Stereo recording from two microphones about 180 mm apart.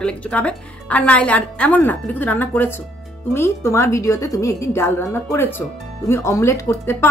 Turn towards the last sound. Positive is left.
turn(degrees=15)  # may be behind; listen again after turning